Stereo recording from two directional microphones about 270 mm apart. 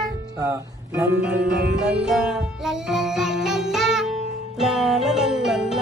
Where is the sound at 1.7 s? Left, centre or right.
Centre.